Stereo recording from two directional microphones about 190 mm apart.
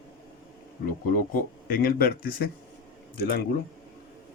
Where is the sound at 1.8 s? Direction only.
55° left (ahead or behind).